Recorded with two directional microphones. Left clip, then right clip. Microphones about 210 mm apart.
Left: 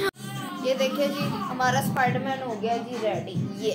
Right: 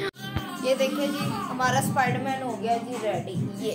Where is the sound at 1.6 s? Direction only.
10° left (ahead or behind).